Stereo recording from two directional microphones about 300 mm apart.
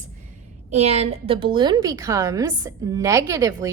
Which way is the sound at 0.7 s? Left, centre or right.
Right.